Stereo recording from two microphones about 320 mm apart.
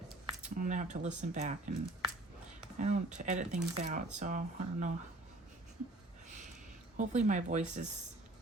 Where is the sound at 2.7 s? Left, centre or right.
Right.